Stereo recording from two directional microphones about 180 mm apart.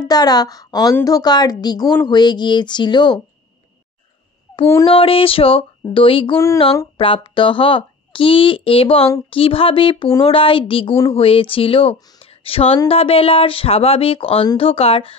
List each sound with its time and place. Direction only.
0.0 s a woman's voice: 20° left (ahead or behind)
4.8 s a woman's voice: 30° left (ahead or behind)
6.3 s a sound: 15° left (ahead or behind)
7.0 s a woman's voice: 30° left (ahead or behind)